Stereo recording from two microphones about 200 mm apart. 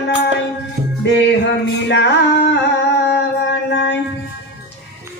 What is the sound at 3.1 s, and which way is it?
Music, 60° left (ahead or behind).